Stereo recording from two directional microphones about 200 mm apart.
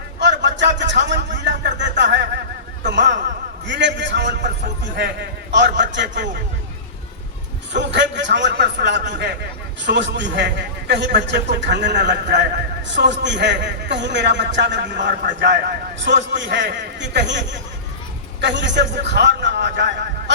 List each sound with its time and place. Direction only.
0.2 s a sound: 60° right (ahead or behind)
3.7 s a man's voice: 60° right (ahead or behind)
7.7 s a man's voice: 60° right (ahead or behind)